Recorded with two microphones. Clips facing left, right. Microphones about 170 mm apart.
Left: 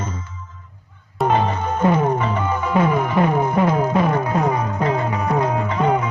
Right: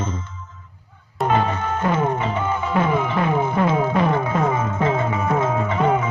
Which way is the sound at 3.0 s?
40° left (ahead or behind).